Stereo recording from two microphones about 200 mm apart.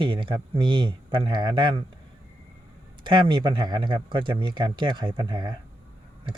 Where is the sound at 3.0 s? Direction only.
25° right (ahead or behind).